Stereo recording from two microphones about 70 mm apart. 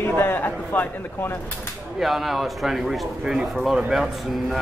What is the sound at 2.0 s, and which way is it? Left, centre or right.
Speech, centre.